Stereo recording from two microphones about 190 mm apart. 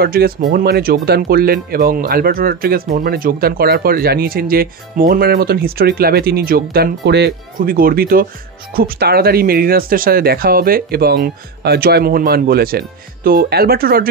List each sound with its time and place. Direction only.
0.0 s speech: 50° right (ahead or behind)